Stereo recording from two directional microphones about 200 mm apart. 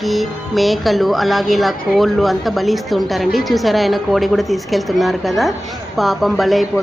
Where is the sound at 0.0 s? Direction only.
Centre (ahead or behind).